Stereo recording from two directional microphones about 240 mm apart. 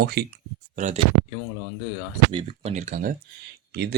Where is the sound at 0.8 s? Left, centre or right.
Right.